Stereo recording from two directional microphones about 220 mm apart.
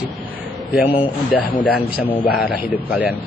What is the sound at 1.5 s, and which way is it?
Speech, 40° left (ahead or behind).